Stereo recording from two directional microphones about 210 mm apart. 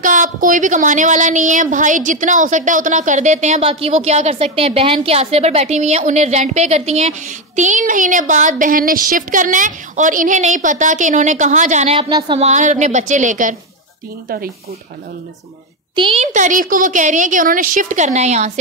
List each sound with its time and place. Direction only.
0.0 s speech: 40° right (ahead or behind)
15.9 s speech: 25° right (ahead or behind)